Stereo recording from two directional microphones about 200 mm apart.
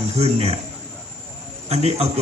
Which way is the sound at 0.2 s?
30° right (ahead or behind).